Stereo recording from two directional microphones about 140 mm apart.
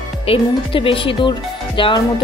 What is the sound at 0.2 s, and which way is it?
Speech, 40° left (ahead or behind).